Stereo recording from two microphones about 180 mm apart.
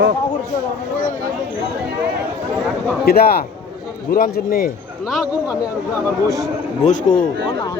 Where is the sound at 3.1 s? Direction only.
55° left (ahead or behind).